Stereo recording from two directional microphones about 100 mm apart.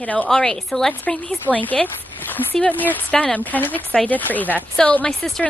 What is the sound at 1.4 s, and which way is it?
Speech, 15° left (ahead or behind).